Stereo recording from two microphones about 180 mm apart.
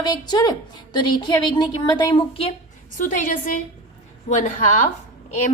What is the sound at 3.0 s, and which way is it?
Speech, 45° left (ahead or behind).